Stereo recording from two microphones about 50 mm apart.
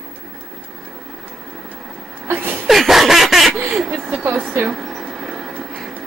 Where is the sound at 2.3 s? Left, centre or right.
Right.